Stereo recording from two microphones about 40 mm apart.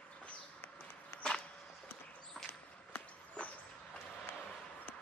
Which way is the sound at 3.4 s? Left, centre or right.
Left.